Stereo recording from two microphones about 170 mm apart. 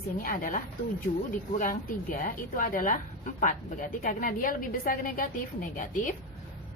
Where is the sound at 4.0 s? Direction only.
55° left (ahead or behind).